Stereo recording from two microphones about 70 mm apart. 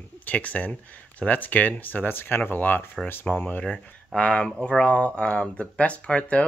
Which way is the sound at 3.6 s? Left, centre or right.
Centre.